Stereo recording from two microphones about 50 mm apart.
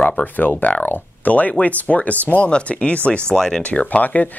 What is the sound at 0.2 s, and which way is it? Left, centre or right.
Speech, left.